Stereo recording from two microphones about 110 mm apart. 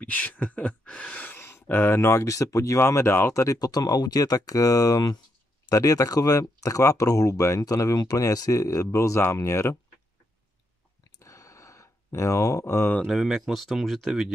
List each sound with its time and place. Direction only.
0.0 s speech: 15° left (ahead or behind)
11.1 s a sound: 30° left (ahead or behind)
13.0 s speech: centre (ahead or behind)